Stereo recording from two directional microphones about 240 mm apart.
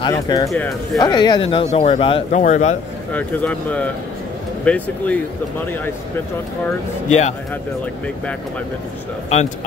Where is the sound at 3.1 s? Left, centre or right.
Centre.